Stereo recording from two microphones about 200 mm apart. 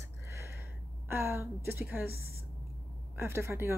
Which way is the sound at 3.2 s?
15° right (ahead or behind).